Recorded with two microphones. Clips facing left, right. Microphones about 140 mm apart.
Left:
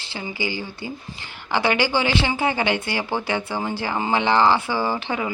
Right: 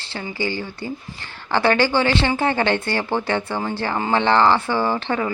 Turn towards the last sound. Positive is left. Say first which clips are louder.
# right 3 dB
turn(degrees=10)  # may be behind; listen again after turning